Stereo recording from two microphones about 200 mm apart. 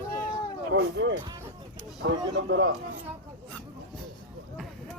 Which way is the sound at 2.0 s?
65° right (ahead or behind).